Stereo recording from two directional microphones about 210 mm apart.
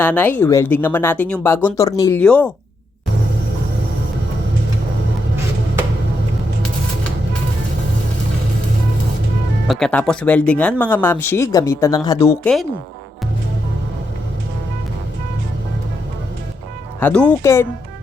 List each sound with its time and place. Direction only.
0.0 s speech: 10° left (ahead or behind)
9.6 s speech: 5° left (ahead or behind)
17.0 s speech: 5° left (ahead or behind)